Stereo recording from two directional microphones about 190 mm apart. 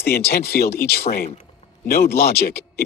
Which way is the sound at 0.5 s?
50° left (ahead or behind).